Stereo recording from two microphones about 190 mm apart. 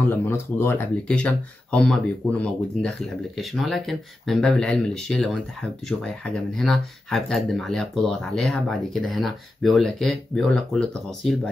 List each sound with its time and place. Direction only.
0.0 s speech: 10° left (ahead or behind)